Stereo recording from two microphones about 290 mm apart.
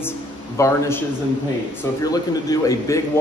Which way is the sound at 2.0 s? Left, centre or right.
Centre.